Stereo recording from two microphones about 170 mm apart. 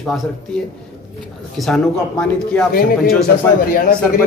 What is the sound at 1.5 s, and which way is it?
Speech, centre (ahead or behind).